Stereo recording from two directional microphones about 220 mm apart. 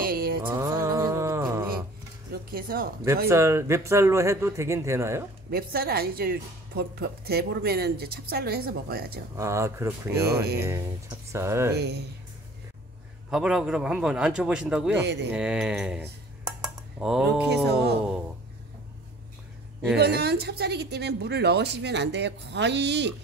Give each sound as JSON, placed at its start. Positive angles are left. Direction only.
{"t": 0.0, "sound": "mantra", "side_deg": -45}
{"t": 0.5, "sound": "mantra", "side_deg": -15}
{"t": 2.5, "sound": "speech", "side_deg": -40}
{"t": 3.3, "sound": "a man's voice", "side_deg": -10}
{"t": 5.5, "sound": "speech", "side_deg": -45}
{"t": 9.4, "sound": "a man's voice", "side_deg": -15}
{"t": 11.7, "sound": "speech", "side_deg": -50}
{"t": 13.3, "sound": "a man's voice", "side_deg": 0}
{"t": 15.0, "sound": "speech", "side_deg": -50}
{"t": 15.3, "sound": "a man's voice", "side_deg": -5}
{"t": 20.0, "sound": "speech", "side_deg": -45}